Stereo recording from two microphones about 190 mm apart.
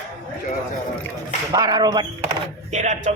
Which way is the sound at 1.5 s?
20° right (ahead or behind).